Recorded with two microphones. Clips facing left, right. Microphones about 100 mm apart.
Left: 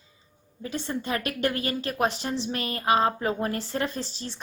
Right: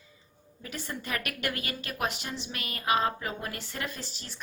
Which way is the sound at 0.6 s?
25° left (ahead or behind).